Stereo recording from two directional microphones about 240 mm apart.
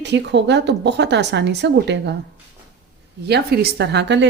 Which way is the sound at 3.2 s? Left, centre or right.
Right.